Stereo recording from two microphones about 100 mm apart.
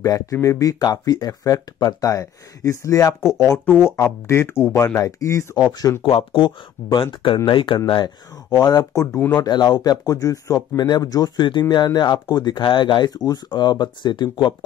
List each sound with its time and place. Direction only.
0.0 s speech: 35° left (ahead or behind)
5.7 s speech: 40° left (ahead or behind)
6.0 s speech: 55° left (ahead or behind); by 9.0 s 40° left (ahead or behind)
9.0 s speech: 20° left (ahead or behind)
9.4 s speech: 40° left (ahead or behind)